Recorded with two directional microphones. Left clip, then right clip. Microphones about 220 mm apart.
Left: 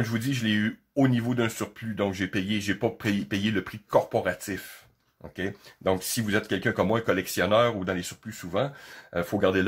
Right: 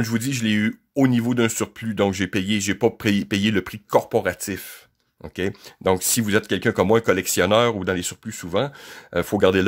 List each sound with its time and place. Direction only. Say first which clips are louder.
0.0 s speech: right 4 dB; 50° right (ahead or behind)